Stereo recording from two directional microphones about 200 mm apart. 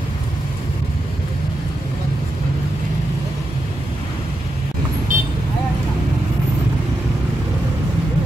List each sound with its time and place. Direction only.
5.1 s vehicle: 40° right (ahead or behind)